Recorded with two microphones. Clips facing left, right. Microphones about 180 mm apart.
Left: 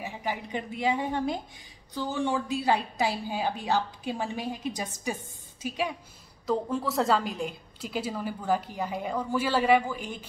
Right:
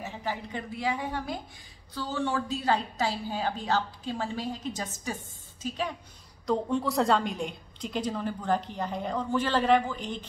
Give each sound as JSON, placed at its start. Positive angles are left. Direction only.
{"t": 0.0, "sound": "a woman's voice", "side_deg": 15}